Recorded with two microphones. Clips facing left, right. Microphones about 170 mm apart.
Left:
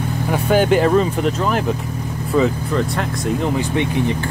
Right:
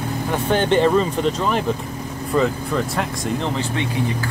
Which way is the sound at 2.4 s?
Centre (ahead or behind).